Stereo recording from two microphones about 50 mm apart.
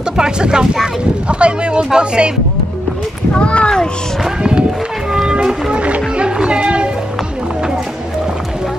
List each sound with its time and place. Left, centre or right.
0.2 s speech: centre
3.3 s a child's voice: left
4.4 s speech: centre
5.1 s music: centre